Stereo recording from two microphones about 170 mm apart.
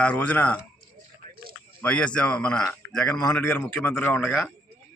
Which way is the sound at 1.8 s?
5° left (ahead or behind).